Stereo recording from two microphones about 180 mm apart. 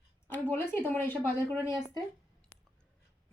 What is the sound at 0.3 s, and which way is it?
A woman's voice, 10° left (ahead or behind).